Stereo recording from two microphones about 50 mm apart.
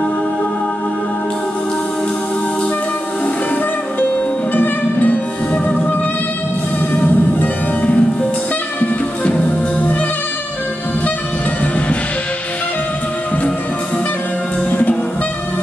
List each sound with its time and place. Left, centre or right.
4.6 s music: left
5.5 s music: left
6.9 s music: left
7.8 s music: left
14.7 s music: left